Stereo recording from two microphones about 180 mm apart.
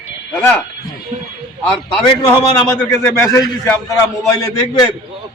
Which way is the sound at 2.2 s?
20° left (ahead or behind).